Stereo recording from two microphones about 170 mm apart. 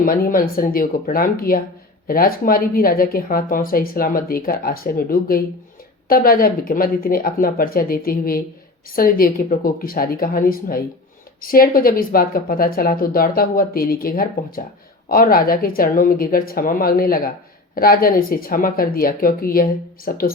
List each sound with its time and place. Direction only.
0.0 s a woman's voice: 55° left (ahead or behind)